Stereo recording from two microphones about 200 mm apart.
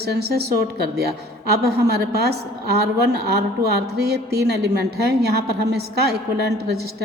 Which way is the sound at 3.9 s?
55° right (ahead or behind).